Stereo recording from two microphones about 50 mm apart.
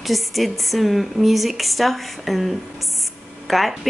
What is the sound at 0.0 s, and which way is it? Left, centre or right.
Speech, centre.